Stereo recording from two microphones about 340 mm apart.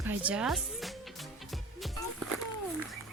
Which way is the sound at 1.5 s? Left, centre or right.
Centre.